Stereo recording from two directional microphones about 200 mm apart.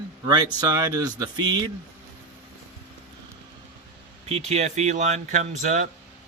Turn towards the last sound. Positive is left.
turn(degrees=-35)  # may be behind; listen again after turning